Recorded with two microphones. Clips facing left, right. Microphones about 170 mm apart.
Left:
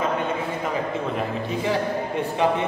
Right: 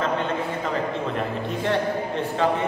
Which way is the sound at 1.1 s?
Centre (ahead or behind).